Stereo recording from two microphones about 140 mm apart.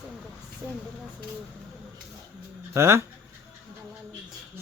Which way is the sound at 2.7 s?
20° right (ahead or behind).